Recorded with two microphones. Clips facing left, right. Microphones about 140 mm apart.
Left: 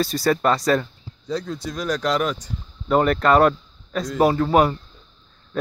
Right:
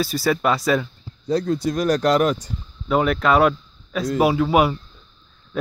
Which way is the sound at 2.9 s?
5° right (ahead or behind).